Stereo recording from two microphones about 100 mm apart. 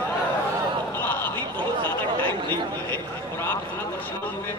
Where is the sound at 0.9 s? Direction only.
20° left (ahead or behind).